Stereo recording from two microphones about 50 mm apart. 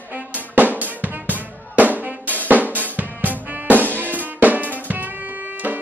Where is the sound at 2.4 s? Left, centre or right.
Right.